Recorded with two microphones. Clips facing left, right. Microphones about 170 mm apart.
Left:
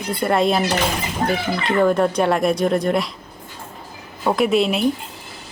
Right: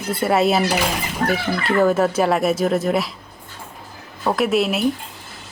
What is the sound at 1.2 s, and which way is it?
Speech, 25° left (ahead or behind).